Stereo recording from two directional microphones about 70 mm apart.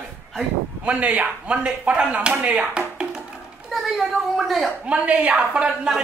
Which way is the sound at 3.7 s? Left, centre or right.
Centre.